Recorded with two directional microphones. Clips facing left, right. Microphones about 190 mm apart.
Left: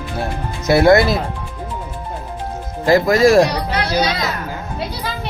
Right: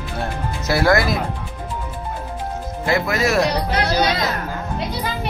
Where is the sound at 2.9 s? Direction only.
35° left (ahead or behind).